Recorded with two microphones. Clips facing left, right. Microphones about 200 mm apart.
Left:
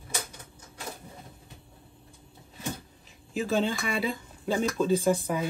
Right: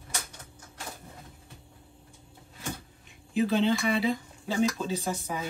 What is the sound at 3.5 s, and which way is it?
Speech, 50° left (ahead or behind).